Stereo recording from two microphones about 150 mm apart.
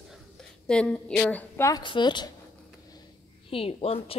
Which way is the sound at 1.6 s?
30° left (ahead or behind).